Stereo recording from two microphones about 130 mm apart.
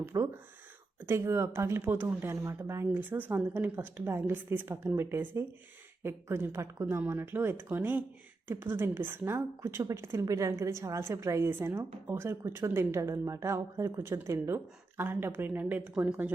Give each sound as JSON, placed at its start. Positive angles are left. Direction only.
{"t": 0.1, "sound": "a woman's voice", "side_deg": -25}